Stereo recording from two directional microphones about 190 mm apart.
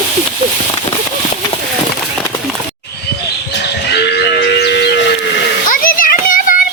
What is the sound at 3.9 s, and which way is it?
Livestock, 60° left (ahead or behind).